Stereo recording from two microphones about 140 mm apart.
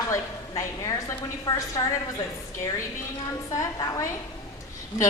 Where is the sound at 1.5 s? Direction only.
25° left (ahead or behind).